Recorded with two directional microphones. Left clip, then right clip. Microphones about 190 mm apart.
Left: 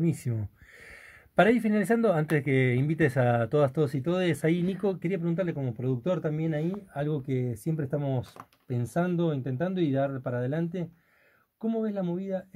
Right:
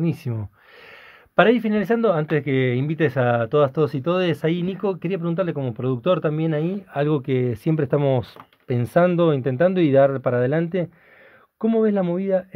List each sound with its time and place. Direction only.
0.0 s speech: 5° right (ahead or behind)
5.0 s speech: 10° right (ahead or behind)
5.6 s speech: 25° right (ahead or behind); by 12.4 s 50° right (ahead or behind)